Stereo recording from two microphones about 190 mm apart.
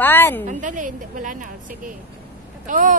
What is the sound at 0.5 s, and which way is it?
Speech, 40° right (ahead or behind).